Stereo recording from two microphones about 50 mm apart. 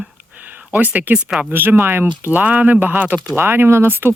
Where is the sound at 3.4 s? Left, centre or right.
Right.